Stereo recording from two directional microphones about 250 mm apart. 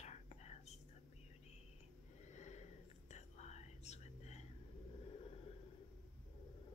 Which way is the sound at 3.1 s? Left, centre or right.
Left.